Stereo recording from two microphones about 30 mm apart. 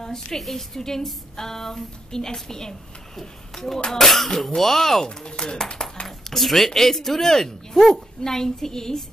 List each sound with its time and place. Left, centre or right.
0.0 s a woman's voice: centre
0.4 s a woman's voice: centre
0.7 s a woman's voice: centre
6.0 s speech: centre